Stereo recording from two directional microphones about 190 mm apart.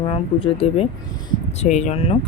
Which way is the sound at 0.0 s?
30° left (ahead or behind).